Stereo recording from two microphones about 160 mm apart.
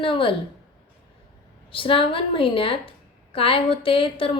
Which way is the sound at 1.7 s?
35° left (ahead or behind).